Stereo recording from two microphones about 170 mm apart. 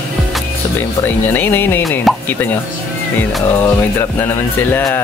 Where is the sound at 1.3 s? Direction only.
10° left (ahead or behind).